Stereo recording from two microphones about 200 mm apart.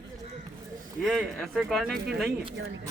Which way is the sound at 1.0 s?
Centre (ahead or behind).